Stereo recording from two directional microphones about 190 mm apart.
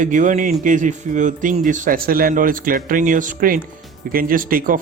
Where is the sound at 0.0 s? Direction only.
40° right (ahead or behind).